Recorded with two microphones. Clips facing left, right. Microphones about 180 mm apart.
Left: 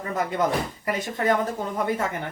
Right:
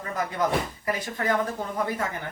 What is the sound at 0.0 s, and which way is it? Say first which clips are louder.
Speech: left 3 dB; 25° left (ahead or behind).